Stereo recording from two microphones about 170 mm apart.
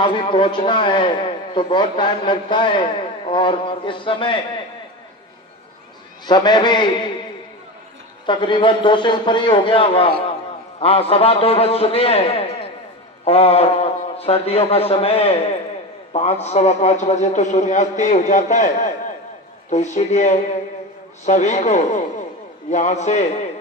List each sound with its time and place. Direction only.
0.0 s a man's voice: 30° left (ahead or behind)
6.2 s a man's voice: 25° left (ahead or behind)
8.3 s a man's voice: 30° left (ahead or behind)
13.2 s a man's voice: 35° left (ahead or behind)